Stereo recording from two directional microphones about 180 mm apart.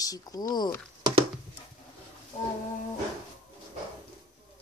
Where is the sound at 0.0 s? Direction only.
20° left (ahead or behind).